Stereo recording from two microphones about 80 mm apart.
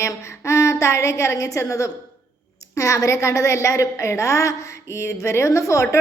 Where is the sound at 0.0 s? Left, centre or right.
Left.